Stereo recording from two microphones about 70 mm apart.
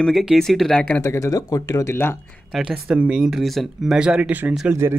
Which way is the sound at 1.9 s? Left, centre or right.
Left.